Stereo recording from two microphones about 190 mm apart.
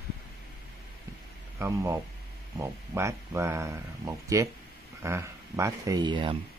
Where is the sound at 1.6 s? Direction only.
15° right (ahead or behind).